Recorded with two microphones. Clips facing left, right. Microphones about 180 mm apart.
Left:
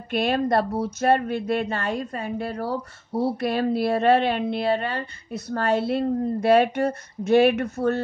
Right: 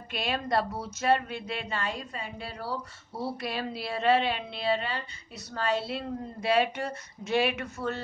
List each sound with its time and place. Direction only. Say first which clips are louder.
0.1 s speech: left 8 dB; 55° left (ahead or behind)